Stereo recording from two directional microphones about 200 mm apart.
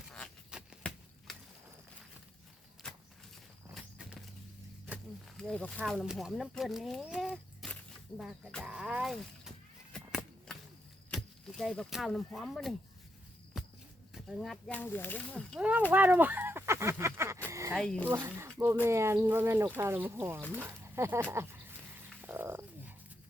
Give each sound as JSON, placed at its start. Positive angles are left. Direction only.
{"t": 0.1, "sound": "a sound", "side_deg": 0}
{"t": 2.8, "sound": "vehicle", "side_deg": 5}
{"t": 3.8, "sound": "walk", "side_deg": -5}
{"t": 5.4, "sound": "speech", "side_deg": 5}
{"t": 8.2, "sound": "a sound", "side_deg": 0}
{"t": 11.1, "sound": "speech", "side_deg": 0}
{"t": 13.5, "sound": "walk", "side_deg": 0}
{"t": 14.1, "sound": "speech", "side_deg": 0}
{"t": 15.9, "sound": "speech", "side_deg": -10}
{"t": 17.5, "sound": "a sound", "side_deg": -15}
{"t": 17.7, "sound": "speech", "side_deg": 5}
{"t": 18.1, "sound": "speech", "side_deg": -10}
{"t": 22.2, "sound": "frog", "side_deg": -10}